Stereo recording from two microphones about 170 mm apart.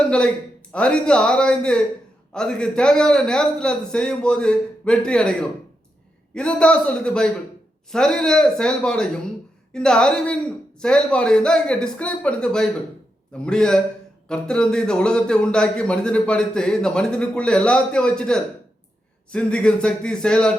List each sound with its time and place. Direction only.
0.0 s a man's voice: 5° left (ahead or behind)